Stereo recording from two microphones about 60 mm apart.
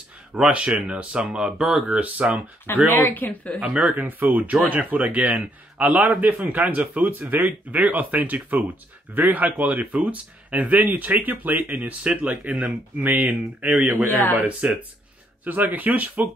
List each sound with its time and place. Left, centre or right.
0.3 s speech: centre
1.2 s speech: centre
2.0 s speech: right
2.9 s speech: left
3.6 s speech: right
6.2 s speech: right
9.6 s speech: right
14.6 s speech: right